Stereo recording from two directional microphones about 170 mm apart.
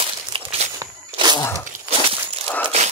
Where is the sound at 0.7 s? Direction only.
25° right (ahead or behind).